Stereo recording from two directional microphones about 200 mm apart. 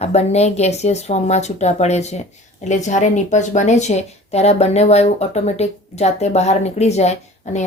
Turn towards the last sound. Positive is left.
turn(degrees=35)  # may be behind; listen again after turning